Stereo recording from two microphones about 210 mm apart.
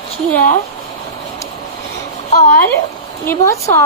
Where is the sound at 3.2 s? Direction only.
15° left (ahead or behind).